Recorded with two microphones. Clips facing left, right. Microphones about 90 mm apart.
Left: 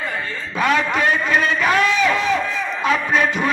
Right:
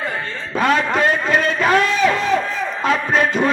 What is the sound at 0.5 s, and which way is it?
A man's voice, 35° right (ahead or behind).